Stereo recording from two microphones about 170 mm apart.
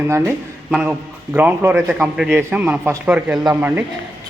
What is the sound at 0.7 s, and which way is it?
A man's voice, 5° right (ahead or behind).